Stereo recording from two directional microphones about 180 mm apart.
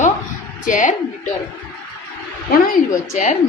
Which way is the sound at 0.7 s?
45° left (ahead or behind).